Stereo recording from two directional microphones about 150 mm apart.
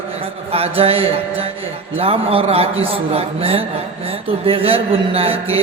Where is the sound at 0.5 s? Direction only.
40° right (ahead or behind).